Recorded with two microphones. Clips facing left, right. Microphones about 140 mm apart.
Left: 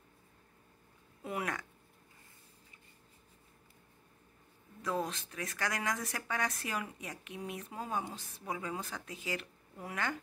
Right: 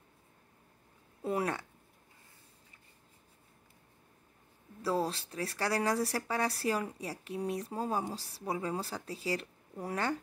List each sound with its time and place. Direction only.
1.2 s speech: 30° right (ahead or behind)
4.8 s speech: 35° right (ahead or behind)